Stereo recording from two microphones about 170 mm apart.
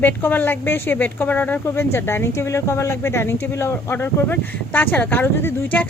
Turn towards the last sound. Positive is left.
turn(degrees=10)  # may be behind; listen again after turning